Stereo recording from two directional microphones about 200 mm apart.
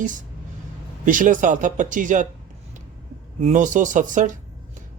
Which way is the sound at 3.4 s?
40° right (ahead or behind).